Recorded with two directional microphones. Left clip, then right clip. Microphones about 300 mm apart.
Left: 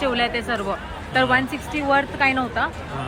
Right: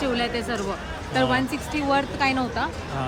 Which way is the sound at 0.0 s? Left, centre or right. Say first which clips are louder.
Left 3 dB; centre.